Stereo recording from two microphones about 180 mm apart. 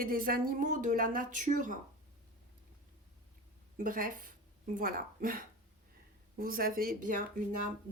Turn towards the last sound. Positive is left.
turn(degrees=-50)  # may be behind; listen again after turning